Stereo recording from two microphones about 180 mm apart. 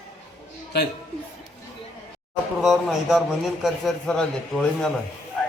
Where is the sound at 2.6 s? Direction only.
Centre (ahead or behind).